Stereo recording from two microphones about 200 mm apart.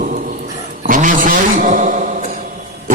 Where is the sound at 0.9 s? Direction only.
40° right (ahead or behind).